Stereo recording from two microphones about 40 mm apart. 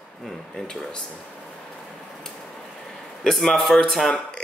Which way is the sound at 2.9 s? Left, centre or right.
Centre.